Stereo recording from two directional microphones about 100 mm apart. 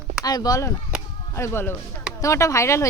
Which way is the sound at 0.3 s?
40° left (ahead or behind).